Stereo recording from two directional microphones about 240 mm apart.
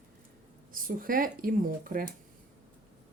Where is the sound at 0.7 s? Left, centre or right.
Right.